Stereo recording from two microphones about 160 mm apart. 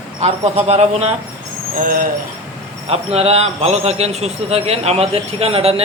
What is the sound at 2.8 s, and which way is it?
Speech, 40° right (ahead or behind).